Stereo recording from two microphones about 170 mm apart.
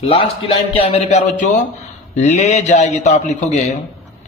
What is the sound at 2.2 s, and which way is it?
A man's voice, 45° left (ahead or behind).